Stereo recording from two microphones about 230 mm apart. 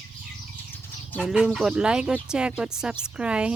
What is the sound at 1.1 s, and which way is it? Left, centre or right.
Chicken, centre.